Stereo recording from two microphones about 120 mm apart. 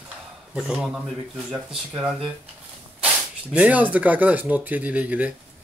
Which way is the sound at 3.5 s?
10° right (ahead or behind).